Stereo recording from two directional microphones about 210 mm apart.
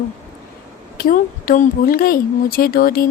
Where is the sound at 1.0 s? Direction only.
40° left (ahead or behind).